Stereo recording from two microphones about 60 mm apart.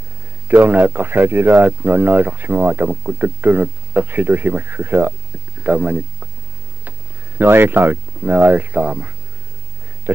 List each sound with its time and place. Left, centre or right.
0.5 s speech: right
5.6 s speech: right
7.3 s speech: right